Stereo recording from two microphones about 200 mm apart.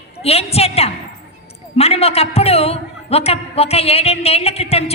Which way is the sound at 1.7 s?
30° left (ahead or behind).